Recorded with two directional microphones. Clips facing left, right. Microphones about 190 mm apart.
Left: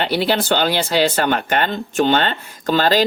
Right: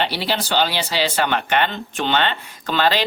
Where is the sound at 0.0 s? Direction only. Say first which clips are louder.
Left 4 dB; 50° left (ahead or behind).